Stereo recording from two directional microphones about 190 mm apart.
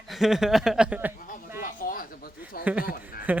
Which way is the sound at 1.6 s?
45° left (ahead or behind).